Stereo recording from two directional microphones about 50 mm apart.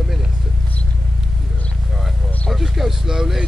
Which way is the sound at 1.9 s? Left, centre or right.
Centre.